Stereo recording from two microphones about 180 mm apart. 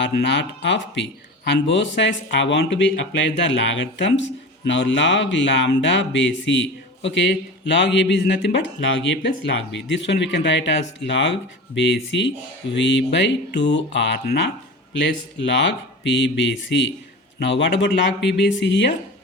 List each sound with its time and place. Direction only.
0.0 s speech: 80° left